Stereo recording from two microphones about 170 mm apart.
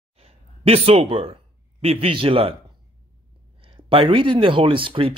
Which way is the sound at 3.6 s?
30° right (ahead or behind).